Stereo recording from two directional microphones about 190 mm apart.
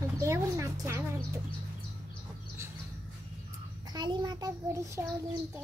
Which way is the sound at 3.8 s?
20° right (ahead or behind).